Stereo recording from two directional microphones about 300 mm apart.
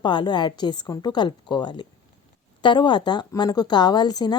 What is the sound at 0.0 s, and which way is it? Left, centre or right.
A woman's voice, centre.